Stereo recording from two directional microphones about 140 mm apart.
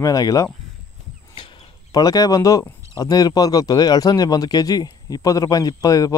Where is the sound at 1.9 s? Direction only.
25° left (ahead or behind).